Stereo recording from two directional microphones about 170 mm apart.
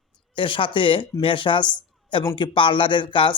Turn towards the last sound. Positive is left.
turn(degrees=30)  # may be behind; listen again after turning